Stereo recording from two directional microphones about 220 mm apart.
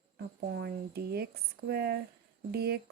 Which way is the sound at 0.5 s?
45° right (ahead or behind).